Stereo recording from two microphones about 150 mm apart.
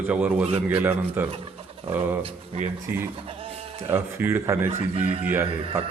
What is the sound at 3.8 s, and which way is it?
A man's voice, 15° right (ahead or behind).